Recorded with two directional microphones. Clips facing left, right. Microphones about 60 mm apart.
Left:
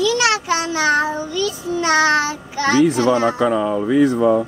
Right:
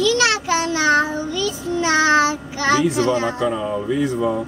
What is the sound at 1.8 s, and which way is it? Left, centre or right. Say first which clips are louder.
Child singing: even; centre.